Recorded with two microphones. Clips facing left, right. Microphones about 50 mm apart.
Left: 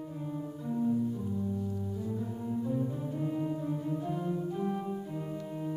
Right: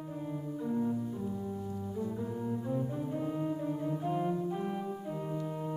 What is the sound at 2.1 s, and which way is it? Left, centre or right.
Music, right.